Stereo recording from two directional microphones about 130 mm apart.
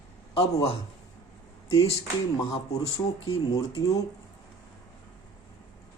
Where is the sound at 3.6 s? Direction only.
25° left (ahead or behind).